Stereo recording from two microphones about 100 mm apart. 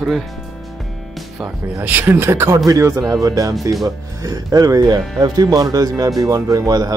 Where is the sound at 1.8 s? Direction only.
20° right (ahead or behind).